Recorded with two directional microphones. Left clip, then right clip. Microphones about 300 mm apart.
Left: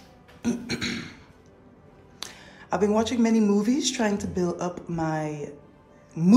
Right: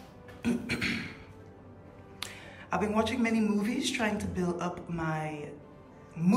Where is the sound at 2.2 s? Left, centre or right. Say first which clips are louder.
Left 2 dB; centre.